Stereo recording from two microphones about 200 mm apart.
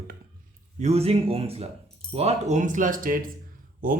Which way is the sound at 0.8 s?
30° right (ahead or behind).